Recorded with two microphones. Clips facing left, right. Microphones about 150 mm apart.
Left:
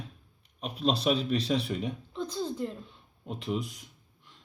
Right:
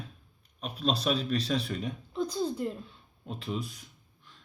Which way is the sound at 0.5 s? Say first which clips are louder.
Left 2 dB; 20° left (ahead or behind).